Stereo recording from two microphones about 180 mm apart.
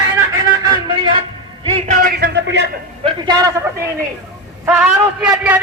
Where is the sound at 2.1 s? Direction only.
65° right (ahead or behind).